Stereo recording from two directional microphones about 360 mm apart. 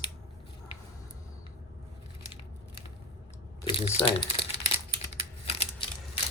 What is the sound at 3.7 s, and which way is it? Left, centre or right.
Speech, centre.